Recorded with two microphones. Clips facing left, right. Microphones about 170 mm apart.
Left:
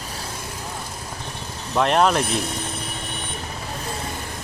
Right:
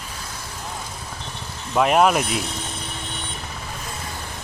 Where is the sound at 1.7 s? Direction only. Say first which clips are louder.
Right 1 dB; 5° right (ahead or behind).